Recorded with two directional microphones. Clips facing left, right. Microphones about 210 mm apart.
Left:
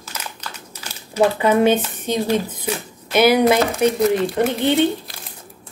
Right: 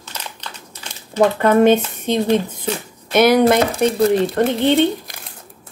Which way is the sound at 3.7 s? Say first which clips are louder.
Right 1 dB; 30° right (ahead or behind).